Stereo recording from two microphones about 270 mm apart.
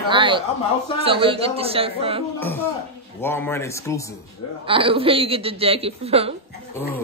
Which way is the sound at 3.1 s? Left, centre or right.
Centre.